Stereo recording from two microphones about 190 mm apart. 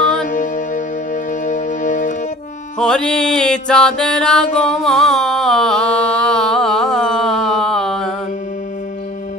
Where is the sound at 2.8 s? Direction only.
5° left (ahead or behind).